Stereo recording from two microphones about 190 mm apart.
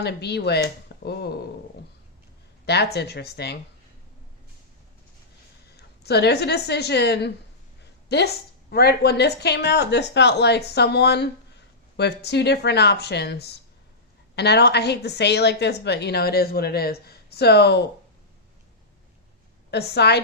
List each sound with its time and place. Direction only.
0.0 s a woman's voice: 60° left (ahead or behind)
2.6 s a woman's voice: 60° left (ahead or behind)
5.6 s a woman's voice: 60° left (ahead or behind)
19.7 s a woman's voice: 60° left (ahead or behind)